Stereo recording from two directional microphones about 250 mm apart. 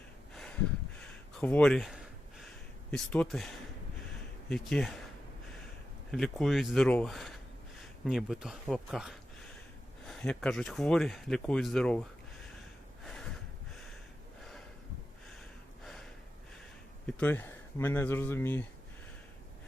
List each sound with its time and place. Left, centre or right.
0.3 s a sound: centre
2.9 s speech: centre
6.1 s speech: centre
13.1 s a sound: centre
15.8 s gasp: centre
17.1 s speech: centre